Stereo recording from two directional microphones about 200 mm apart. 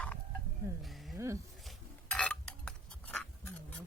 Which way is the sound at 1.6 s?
5° left (ahead or behind).